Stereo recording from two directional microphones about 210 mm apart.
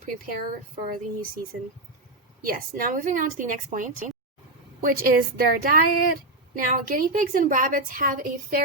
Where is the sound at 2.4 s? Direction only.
40° right (ahead or behind).